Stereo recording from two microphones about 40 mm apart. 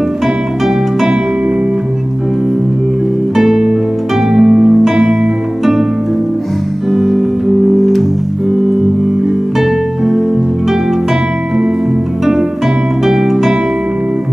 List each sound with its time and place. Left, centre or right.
3.3 s music: centre
6.9 s music: centre
9.6 s music: centre
13.0 s music: centre